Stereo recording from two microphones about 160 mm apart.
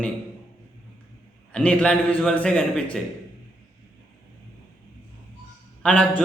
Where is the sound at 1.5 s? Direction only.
5° left (ahead or behind).